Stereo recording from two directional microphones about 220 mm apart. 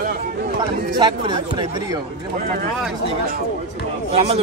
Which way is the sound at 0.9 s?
20° right (ahead or behind).